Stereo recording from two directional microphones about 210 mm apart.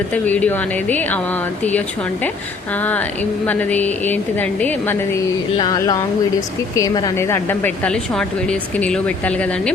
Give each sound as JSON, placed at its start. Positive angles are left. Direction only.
{"t": 0.1, "sound": "speech", "side_deg": 5}
{"t": 3.4, "sound": "speech", "side_deg": 10}